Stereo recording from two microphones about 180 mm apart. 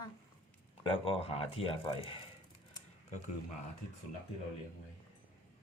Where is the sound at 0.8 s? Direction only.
30° left (ahead or behind).